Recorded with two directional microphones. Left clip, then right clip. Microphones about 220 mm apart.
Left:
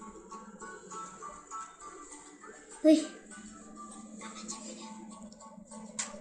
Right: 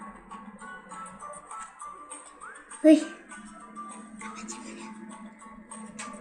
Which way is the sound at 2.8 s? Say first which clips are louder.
Right 5 dB; 15° left (ahead or behind).